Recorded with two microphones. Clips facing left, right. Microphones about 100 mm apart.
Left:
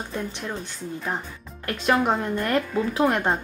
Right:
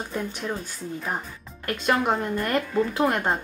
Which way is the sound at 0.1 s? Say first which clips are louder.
Right 2 dB; centre (ahead or behind).